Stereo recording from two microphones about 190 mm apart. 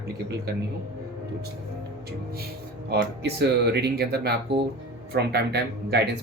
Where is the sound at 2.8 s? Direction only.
60° right (ahead or behind).